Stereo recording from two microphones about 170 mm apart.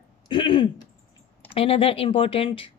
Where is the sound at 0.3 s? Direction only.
30° left (ahead or behind).